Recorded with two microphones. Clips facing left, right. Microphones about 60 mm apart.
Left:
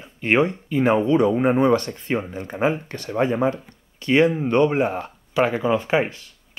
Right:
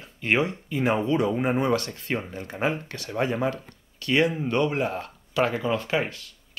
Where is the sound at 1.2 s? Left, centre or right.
Centre.